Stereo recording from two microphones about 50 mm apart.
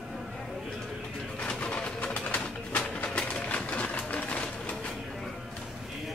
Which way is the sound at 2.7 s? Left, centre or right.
Left.